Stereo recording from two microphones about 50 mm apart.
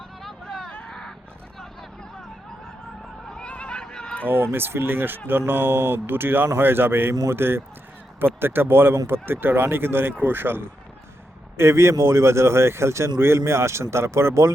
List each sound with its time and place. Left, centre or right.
0.4 s a sound: centre
3.4 s neigh: left
4.5 s speech: right
11.5 s speech: right